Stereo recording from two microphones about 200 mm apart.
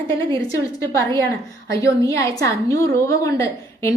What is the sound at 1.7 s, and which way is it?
A woman's voice, 15° left (ahead or behind).